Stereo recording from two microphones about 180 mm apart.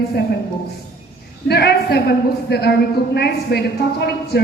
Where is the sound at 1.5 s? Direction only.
65° left (ahead or behind).